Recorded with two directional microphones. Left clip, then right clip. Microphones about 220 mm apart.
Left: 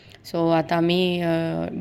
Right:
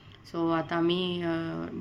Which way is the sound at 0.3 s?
30° left (ahead or behind).